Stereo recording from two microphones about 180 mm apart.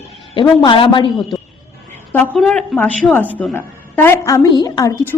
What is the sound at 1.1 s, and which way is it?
A man's voice, centre (ahead or behind).